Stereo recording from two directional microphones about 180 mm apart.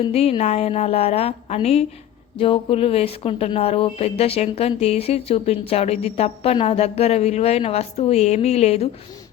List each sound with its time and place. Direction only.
0.0 s speech: 35° left (ahead or behind)